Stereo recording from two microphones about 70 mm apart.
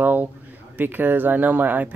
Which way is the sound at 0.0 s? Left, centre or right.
Right.